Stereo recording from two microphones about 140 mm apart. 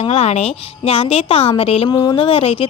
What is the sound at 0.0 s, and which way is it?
A woman's voice, 45° left (ahead or behind).